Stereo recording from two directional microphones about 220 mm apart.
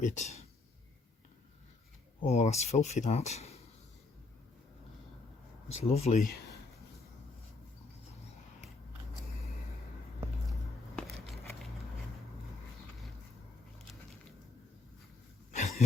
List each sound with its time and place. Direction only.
0.0 s speech: 35° left (ahead or behind)
2.2 s speech: 30° left (ahead or behind)
5.7 s speech: 30° left (ahead or behind)
10.9 s a sound: centre (ahead or behind)
15.5 s cough: 30° left (ahead or behind)